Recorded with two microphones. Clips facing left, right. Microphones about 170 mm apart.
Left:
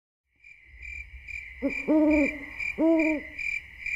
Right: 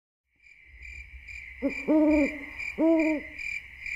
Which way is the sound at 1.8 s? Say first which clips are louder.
Even; centre (ahead or behind).